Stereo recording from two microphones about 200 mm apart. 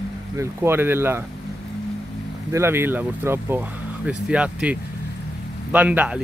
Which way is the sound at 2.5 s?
10° right (ahead or behind).